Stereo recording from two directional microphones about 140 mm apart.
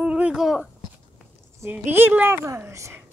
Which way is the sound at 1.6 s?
15° right (ahead or behind).